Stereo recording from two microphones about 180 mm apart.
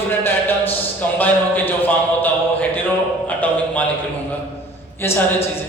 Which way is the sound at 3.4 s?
10° left (ahead or behind).